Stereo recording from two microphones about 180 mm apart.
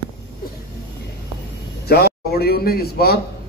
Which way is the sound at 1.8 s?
60° left (ahead or behind).